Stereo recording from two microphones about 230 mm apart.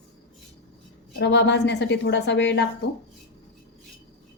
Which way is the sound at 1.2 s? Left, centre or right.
Left.